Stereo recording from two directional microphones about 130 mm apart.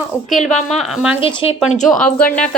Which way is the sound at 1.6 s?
70° left (ahead or behind).